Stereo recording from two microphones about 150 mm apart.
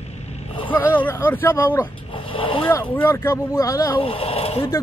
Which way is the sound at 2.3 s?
35° left (ahead or behind).